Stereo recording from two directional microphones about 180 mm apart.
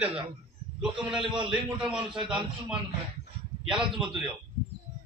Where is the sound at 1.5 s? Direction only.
5° right (ahead or behind).